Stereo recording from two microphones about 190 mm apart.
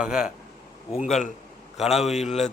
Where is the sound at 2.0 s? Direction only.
35° left (ahead or behind).